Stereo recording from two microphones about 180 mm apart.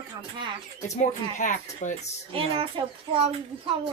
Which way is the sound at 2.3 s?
30° right (ahead or behind).